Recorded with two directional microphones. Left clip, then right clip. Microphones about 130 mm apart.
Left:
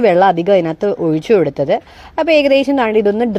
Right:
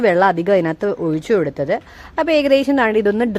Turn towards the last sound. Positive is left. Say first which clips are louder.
# left 3 dB
turn(degrees=10)  # may be behind; listen again after turning